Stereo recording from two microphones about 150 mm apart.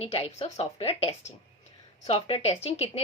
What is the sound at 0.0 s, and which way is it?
Speech, 40° left (ahead or behind).